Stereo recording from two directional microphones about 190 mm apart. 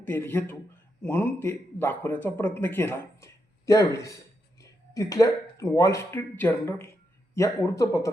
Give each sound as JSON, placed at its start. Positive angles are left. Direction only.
{"t": 0.0, "sound": "speech", "side_deg": 10}